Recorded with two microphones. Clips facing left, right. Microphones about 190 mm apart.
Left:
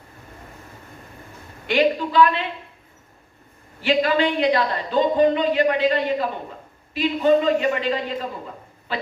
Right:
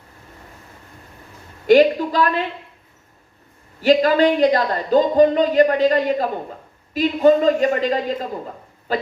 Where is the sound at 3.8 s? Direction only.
40° right (ahead or behind).